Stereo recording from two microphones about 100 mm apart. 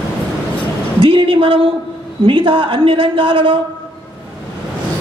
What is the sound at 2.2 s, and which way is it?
Speech, 60° right (ahead or behind).